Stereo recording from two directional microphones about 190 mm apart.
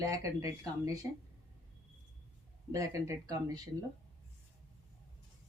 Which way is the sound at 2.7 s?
15° right (ahead or behind).